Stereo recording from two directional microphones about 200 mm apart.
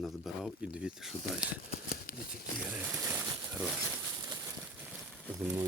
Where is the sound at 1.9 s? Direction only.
45° left (ahead or behind).